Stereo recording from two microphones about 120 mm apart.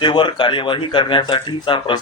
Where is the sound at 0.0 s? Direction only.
40° left (ahead or behind).